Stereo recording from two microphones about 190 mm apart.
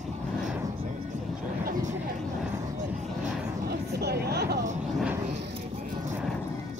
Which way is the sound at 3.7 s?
60° right (ahead or behind).